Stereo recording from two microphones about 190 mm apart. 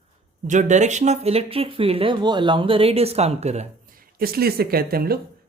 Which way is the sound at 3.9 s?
50° right (ahead or behind).